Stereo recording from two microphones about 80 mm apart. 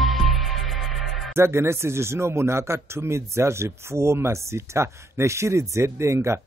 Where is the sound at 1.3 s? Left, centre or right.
Right.